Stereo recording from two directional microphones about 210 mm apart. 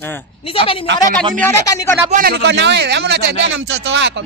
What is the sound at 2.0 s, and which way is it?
Speech, 45° right (ahead or behind).